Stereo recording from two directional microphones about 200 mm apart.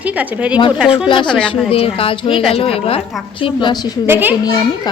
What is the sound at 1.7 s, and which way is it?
A woman's voice, 25° left (ahead or behind).